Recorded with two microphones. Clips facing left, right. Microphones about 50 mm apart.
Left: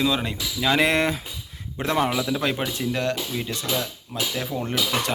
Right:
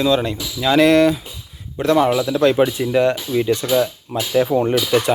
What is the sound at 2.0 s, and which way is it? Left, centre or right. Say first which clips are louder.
Speech: right 6 dB; centre.